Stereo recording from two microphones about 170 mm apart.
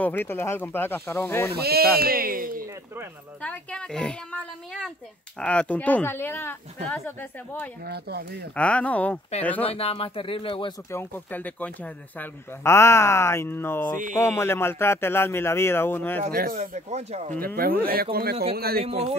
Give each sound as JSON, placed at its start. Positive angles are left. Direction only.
{"t": 0.0, "sound": "speech", "side_deg": 10}
{"t": 1.5, "sound": "speech", "side_deg": -65}
{"t": 3.4, "sound": "a woman's voice", "side_deg": 5}
{"t": 7.8, "sound": "speech", "side_deg": -70}
{"t": 8.5, "sound": "speech", "side_deg": 5}
{"t": 9.7, "sound": "speech", "side_deg": 35}
{"t": 10.9, "sound": "speech", "side_deg": 10}
{"t": 16.3, "sound": "speech", "side_deg": -65}
{"t": 16.5, "sound": "speech", "side_deg": -45}
{"t": 18.1, "sound": "speech", "side_deg": -65}
{"t": 18.8, "sound": "a man's voice", "side_deg": -35}